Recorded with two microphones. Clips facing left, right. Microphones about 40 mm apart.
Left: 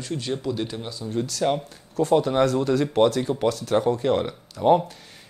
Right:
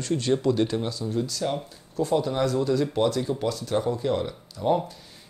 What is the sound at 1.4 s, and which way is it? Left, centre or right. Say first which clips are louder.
Speech: left 7 dB; left.